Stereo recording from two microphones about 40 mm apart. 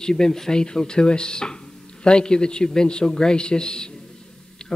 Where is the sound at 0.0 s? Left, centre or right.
Centre.